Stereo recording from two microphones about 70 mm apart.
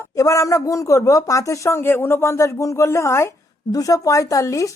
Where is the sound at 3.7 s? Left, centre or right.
Left.